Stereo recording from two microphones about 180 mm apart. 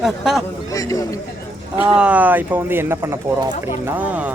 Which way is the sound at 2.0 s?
10° right (ahead or behind).